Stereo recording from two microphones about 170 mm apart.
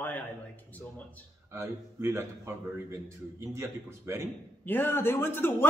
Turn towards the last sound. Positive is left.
turn(degrees=15)  # may be behind; listen again after turning